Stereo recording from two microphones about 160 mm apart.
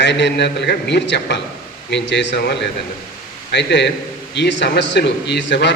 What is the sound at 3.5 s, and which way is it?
A man's voice, 90° left.